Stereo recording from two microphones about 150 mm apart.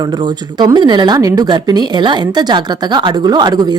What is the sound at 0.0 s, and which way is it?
A woman's voice, 30° right (ahead or behind).